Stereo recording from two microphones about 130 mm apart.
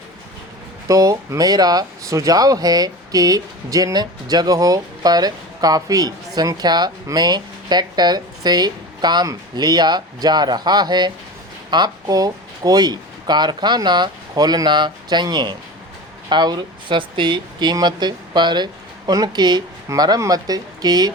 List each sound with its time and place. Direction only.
0.9 s speech: 30° right (ahead or behind)